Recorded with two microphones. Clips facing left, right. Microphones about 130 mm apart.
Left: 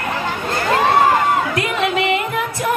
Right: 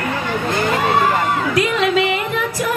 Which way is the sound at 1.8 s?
25° left (ahead or behind).